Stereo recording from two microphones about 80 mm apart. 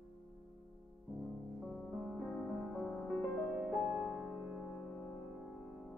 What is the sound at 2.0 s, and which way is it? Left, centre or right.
Music, centre.